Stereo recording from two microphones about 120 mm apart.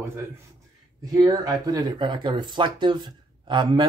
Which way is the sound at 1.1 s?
30° right (ahead or behind).